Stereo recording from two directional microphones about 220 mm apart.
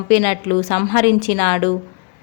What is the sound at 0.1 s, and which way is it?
Speech, 30° left (ahead or behind).